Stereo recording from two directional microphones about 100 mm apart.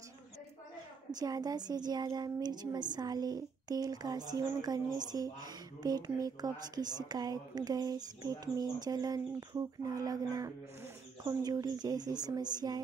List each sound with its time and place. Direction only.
1.1 s a woman's voice: 40° right (ahead or behind)